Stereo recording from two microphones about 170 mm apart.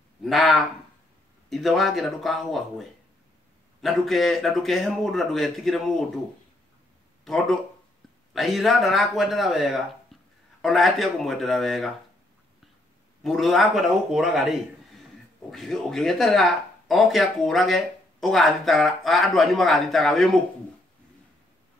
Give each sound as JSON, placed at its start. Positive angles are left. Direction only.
{"t": 0.2, "sound": "speech", "side_deg": 0}
{"t": 7.2, "sound": "speech", "side_deg": 0}
{"t": 13.2, "sound": "speech", "side_deg": 0}
{"t": 15.5, "sound": "speech", "side_deg": 0}